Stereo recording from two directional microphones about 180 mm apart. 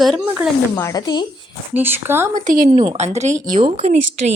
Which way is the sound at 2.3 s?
45° right (ahead or behind).